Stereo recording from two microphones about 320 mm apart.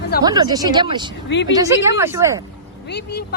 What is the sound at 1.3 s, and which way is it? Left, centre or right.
Speech, left.